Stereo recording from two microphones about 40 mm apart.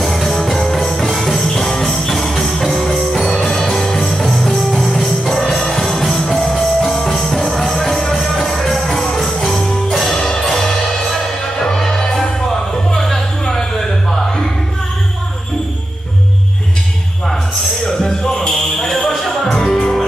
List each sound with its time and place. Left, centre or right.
0.0 s music: centre
17.8 s music: centre